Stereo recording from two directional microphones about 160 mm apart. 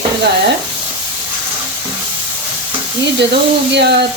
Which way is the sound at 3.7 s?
90° right.